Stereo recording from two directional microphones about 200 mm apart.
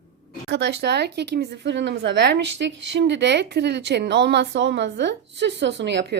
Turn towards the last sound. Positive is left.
turn(degrees=-60)  # may be behind; listen again after turning